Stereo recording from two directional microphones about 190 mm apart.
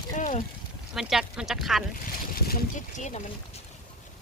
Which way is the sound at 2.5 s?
40° left (ahead or behind).